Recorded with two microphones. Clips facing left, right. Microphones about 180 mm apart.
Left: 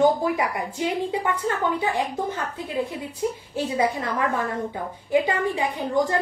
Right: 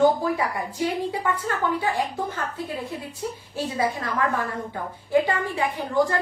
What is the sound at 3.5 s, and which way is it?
A woman's voice, 20° left (ahead or behind).